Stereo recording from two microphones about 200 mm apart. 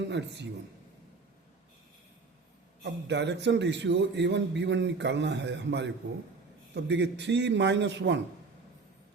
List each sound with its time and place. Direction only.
0.1 s a man's voice: 60° right (ahead or behind)
2.8 s a man's voice: 60° right (ahead or behind)